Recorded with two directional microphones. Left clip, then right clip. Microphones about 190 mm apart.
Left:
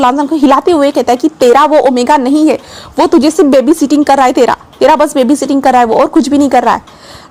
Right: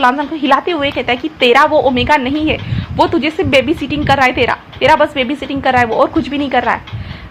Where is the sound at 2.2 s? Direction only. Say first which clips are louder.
Left 8 dB; 80° left.